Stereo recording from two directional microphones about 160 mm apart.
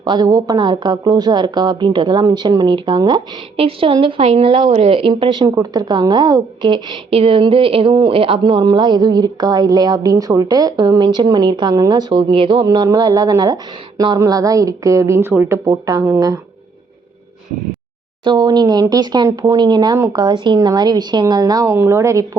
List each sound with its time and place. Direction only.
0.0 s a woman's voice: 25° right (ahead or behind)
18.3 s a woman's voice: 25° right (ahead or behind)